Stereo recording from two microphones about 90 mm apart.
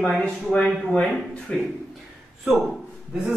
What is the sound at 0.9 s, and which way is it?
Speech, 10° left (ahead or behind).